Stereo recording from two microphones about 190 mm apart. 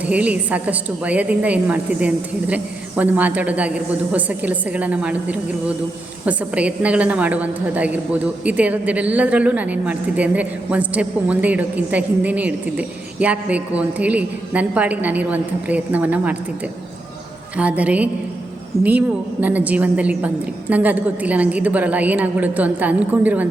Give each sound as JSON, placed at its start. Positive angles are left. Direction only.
{"t": 0.1, "sound": "a woman's voice", "side_deg": -5}
{"t": 17.6, "sound": "a woman's voice", "side_deg": -5}